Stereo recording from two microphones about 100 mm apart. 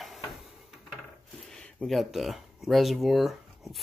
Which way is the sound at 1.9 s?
Centre (ahead or behind).